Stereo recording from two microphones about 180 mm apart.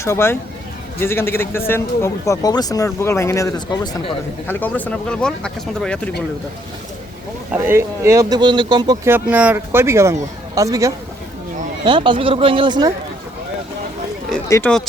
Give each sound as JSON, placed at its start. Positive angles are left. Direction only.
{"t": 0.0, "sound": "a man's voice", "side_deg": 15}
{"t": 7.5, "sound": "speech", "side_deg": -10}
{"t": 9.0, "sound": "speech", "side_deg": -10}
{"t": 14.4, "sound": "speech", "side_deg": 15}